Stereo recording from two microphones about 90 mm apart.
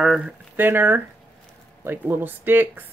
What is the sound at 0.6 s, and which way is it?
Speech, 25° right (ahead or behind).